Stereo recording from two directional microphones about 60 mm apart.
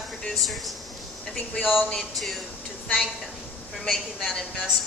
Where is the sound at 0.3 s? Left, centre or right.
Centre.